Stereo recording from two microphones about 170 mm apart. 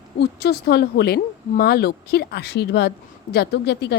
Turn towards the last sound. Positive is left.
turn(degrees=80)